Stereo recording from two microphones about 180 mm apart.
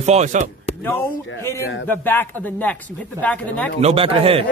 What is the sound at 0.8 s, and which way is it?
Speech, 10° left (ahead or behind).